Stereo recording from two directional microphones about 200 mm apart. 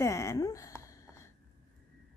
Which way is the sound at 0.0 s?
15° left (ahead or behind).